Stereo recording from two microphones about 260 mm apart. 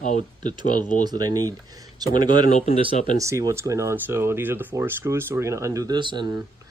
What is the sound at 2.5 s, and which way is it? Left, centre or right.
Speech, left.